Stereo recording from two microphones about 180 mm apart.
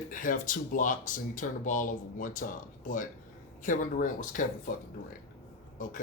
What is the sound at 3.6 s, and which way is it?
Speech, 45° left (ahead or behind).